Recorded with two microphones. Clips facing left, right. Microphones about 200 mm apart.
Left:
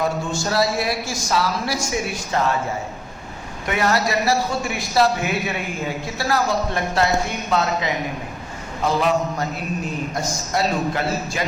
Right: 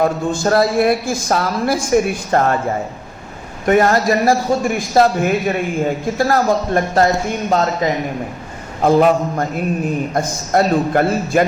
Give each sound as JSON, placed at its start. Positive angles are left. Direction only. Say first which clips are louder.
{"t": 0.0, "sound": "a man's voice", "louder": "right 6 dB", "side_deg": -55}
{"t": 3.7, "sound": "a man's voice", "louder": "right 8 dB", "side_deg": -45}